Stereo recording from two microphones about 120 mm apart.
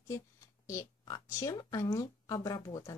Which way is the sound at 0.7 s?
30° left (ahead or behind).